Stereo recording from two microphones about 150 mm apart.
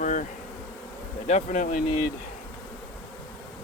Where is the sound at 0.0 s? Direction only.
60° left (ahead or behind).